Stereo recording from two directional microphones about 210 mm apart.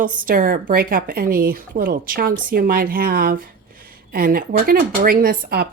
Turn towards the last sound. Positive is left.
turn(degrees=-45)  # may be behind; listen again after turning